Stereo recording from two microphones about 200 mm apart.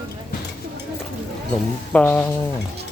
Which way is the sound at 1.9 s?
5° left (ahead or behind).